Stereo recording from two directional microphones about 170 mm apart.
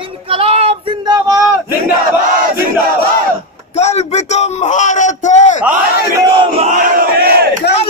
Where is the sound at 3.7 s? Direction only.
40° left (ahead or behind).